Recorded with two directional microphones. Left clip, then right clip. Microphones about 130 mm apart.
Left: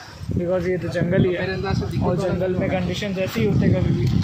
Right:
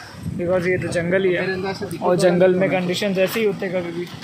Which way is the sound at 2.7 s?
15° right (ahead or behind).